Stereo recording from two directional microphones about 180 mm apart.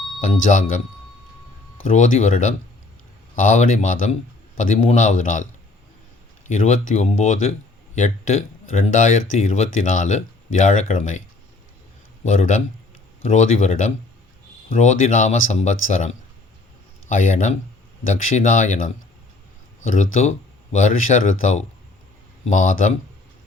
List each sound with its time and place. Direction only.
1.8 s speech: 45° left (ahead or behind)
6.5 s speech: 45° left (ahead or behind)
12.2 s speech: 45° left (ahead or behind)
19.9 s speech: 45° left (ahead or behind)